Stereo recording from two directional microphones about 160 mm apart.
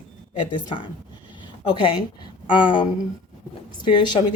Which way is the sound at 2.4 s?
30° left (ahead or behind).